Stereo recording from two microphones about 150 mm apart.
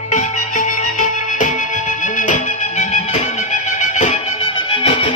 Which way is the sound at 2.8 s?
45° left (ahead or behind).